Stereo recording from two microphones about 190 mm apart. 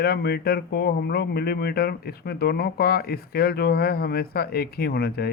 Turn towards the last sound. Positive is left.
turn(degrees=55)  # may be behind; listen again after turning